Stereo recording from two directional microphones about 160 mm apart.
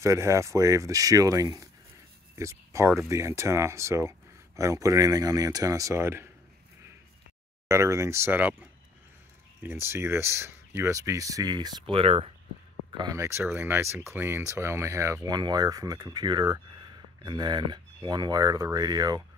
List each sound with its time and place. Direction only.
0.0 s speech: 20° right (ahead or behind)
7.6 s speech: 20° right (ahead or behind); by 12.3 s 35° right (ahead or behind)
12.9 s speech: 20° right (ahead or behind)